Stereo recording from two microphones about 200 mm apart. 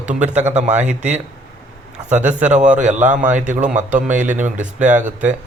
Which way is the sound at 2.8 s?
40° right (ahead or behind).